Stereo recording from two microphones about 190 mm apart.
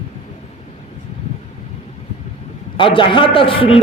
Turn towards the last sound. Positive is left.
turn(degrees=30)  # may be behind; listen again after turning